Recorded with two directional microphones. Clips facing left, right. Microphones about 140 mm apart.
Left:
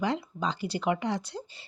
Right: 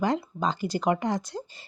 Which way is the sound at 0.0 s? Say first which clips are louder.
Right 3 dB; 45° right (ahead or behind).